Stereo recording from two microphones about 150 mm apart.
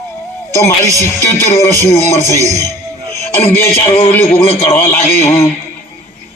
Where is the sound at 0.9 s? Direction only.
20° right (ahead or behind).